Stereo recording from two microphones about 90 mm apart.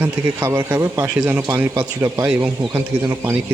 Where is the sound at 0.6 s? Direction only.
25° right (ahead or behind).